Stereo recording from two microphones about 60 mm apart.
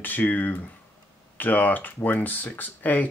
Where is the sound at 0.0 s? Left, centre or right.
Left.